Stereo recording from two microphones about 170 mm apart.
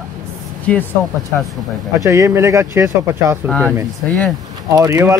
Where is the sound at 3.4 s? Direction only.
10° left (ahead or behind).